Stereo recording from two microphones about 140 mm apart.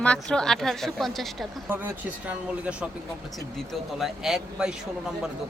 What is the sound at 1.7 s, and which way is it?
Speech, 15° right (ahead or behind).